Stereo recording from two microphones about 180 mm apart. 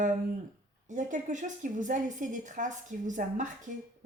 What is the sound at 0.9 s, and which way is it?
Speech, 45° right (ahead or behind).